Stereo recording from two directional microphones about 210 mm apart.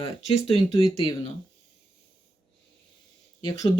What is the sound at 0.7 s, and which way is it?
Speech, 25° left (ahead or behind).